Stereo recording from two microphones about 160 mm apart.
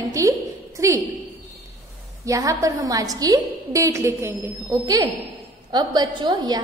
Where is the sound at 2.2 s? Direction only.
20° right (ahead or behind).